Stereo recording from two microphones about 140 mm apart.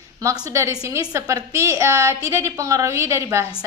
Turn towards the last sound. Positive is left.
turn(degrees=-20)  # may be behind; listen again after turning